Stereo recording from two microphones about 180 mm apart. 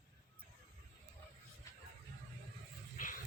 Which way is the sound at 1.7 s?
20° left (ahead or behind).